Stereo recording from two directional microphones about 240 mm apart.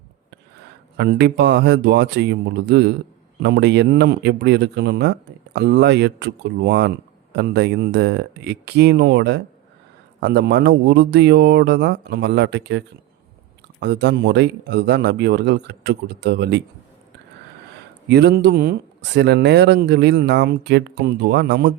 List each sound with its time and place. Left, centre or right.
0.9 s speech: right
18.1 s speech: right